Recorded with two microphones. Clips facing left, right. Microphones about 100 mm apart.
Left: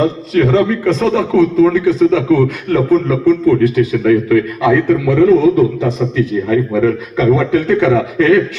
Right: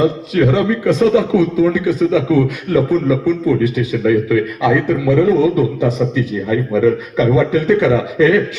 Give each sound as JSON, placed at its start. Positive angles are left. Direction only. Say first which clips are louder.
{"t": 0.0, "sound": "a man's voice", "louder": "left 1 dB", "side_deg": -10}